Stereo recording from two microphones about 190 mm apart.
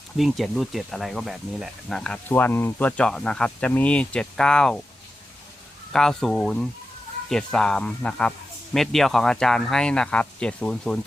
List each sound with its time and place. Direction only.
0.2 s speech: centre (ahead or behind)
5.9 s speech: centre (ahead or behind)